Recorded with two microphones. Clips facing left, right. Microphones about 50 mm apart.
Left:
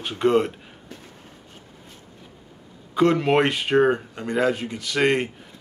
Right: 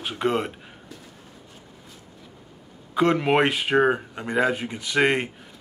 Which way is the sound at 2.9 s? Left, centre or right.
Centre.